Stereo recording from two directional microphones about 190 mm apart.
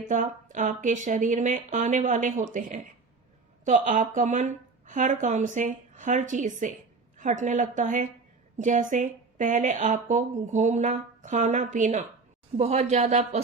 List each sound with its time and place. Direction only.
0.0 s speech: 40° right (ahead or behind)